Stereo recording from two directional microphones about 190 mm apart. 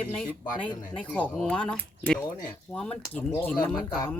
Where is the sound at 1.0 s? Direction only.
5° left (ahead or behind).